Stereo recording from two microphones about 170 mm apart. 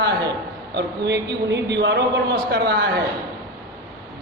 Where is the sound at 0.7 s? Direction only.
85° right.